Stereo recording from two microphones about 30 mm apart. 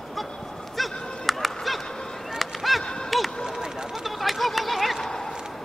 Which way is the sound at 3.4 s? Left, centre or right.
Right.